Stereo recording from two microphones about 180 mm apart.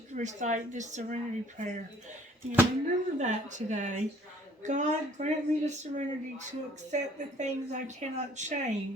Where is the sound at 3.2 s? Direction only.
40° right (ahead or behind).